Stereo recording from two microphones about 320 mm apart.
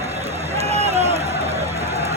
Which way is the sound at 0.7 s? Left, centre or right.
Centre.